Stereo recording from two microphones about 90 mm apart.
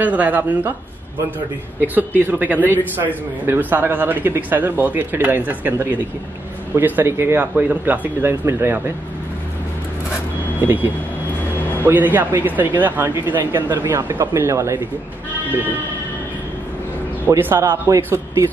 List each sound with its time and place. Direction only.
0.0 s a woman's voice: 20° right (ahead or behind)
2.0 s speech: 20° right (ahead or behind)
10.6 s speech: 25° right (ahead or behind)
17.3 s speech: 25° right (ahead or behind)